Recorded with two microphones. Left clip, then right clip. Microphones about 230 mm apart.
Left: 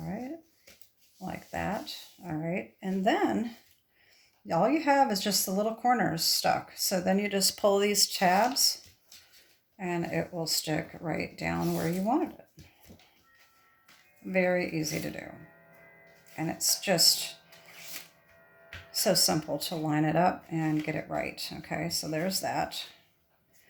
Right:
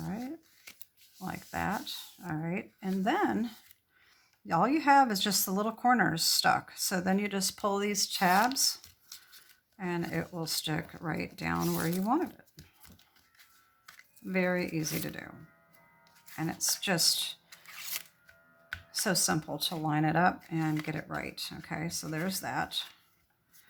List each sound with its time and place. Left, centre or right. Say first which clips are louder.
0.0 s a sound: left 2 dB; centre
4.4 s speech: even; centre
9.7 s speech: left 3 dB; centre
14.3 s speech: left 4 dB; centre
16.3 s speech: left 3 dB; centre
19.0 s speech: left 5 dB; centre